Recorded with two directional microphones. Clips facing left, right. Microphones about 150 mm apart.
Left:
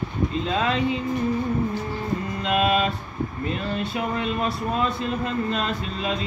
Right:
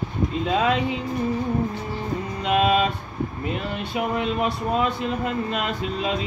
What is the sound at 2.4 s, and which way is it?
Music, 15° right (ahead or behind).